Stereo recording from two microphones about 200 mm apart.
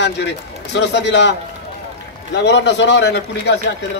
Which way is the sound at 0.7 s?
60° left (ahead or behind).